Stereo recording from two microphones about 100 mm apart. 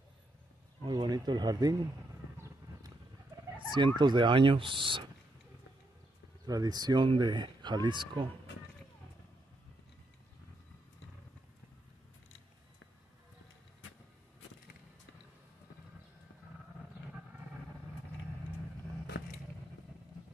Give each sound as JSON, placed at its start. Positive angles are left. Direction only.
{"t": 0.8, "sound": "speech", "side_deg": -45}
{"t": 3.5, "sound": "fowl", "side_deg": -50}
{"t": 6.4, "sound": "speech", "side_deg": -40}